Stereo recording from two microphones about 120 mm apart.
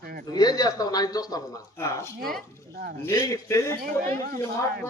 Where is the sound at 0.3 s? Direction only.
35° left (ahead or behind).